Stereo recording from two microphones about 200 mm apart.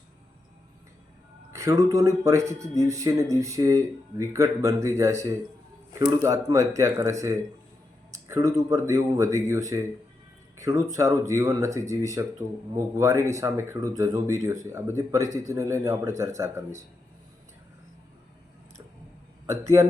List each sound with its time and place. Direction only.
1.5 s speech: 15° right (ahead or behind)